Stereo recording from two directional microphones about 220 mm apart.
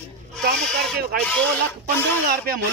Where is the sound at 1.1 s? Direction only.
40° right (ahead or behind).